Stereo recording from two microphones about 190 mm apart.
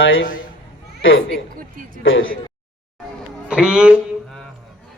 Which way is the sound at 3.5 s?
5° right (ahead or behind).